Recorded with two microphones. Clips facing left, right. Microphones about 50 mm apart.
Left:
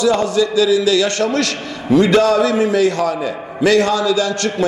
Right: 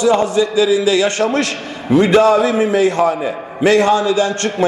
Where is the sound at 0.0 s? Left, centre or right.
Right.